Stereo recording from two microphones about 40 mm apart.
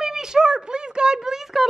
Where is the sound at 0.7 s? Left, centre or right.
Right.